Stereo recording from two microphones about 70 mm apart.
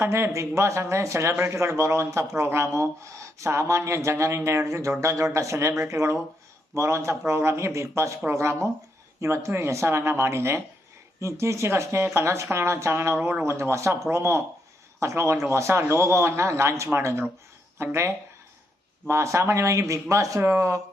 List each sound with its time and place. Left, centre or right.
0.0 s a man's voice: right
13.4 s a man's voice: right
19.0 s speech: right